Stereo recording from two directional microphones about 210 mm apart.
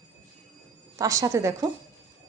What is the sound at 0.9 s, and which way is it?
Speech, 15° right (ahead or behind).